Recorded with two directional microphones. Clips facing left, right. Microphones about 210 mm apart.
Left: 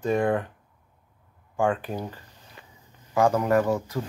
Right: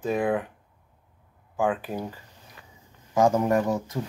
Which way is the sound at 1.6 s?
5° right (ahead or behind).